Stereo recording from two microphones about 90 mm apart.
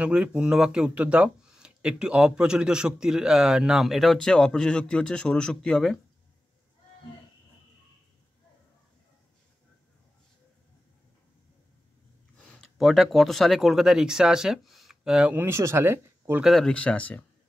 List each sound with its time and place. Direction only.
0.0 s speech: 15° right (ahead or behind); by 5.9 s 5° left (ahead or behind)
12.4 s speech: 5° left (ahead or behind)
15.3 s speech: 30° right (ahead or behind)
16.4 s speech: 5° left (ahead or behind)
16.7 s speech: 15° left (ahead or behind)